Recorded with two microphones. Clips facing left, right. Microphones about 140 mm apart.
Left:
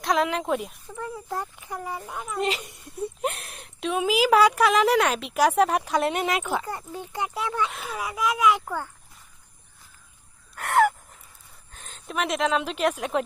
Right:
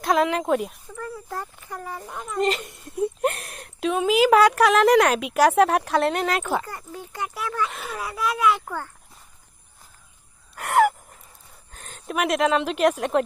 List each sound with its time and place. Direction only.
0.0 s speech: centre (ahead or behind)
0.9 s speech: 15° left (ahead or behind)
6.7 s speech: 25° left (ahead or behind)
7.7 s speech: 5° left (ahead or behind)
10.5 s gasp: 5° right (ahead or behind)
11.8 s speech: centre (ahead or behind)